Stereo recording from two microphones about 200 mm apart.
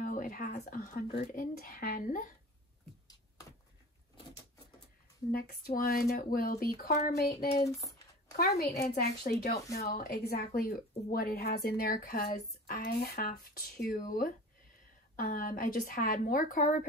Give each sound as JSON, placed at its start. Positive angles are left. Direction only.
{"t": 0.0, "sound": "a woman's voice", "side_deg": 40}
{"t": 5.3, "sound": "a woman's voice", "side_deg": 45}
{"t": 7.6, "sound": "a sound", "side_deg": 15}
{"t": 8.4, "sound": "a woman's voice", "side_deg": 50}